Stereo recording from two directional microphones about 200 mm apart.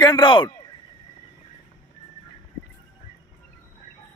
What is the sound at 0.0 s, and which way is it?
Speech, 20° left (ahead or behind).